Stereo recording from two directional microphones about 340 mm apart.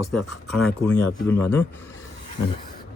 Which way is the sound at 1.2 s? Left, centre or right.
Centre.